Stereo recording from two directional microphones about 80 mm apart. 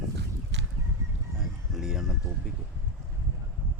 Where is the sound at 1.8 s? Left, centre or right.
Centre.